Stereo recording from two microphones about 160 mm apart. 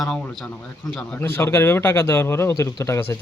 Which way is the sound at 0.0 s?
5° left (ahead or behind).